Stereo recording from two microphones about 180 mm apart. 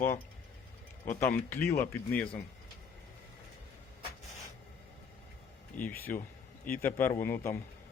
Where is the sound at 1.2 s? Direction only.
10° left (ahead or behind).